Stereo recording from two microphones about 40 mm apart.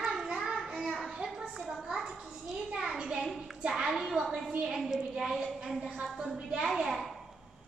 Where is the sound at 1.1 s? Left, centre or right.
Centre.